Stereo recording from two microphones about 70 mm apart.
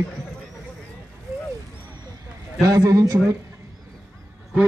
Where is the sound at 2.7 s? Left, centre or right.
Right.